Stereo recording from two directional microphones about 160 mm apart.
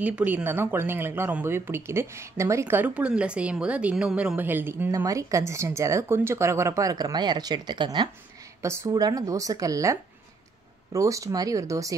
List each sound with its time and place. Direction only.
0.0 s speech: 10° right (ahead or behind)